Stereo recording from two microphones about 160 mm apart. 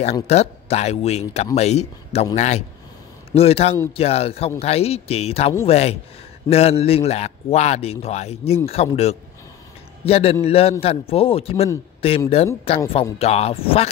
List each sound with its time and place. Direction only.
0.0 s a man's voice: 40° left (ahead or behind)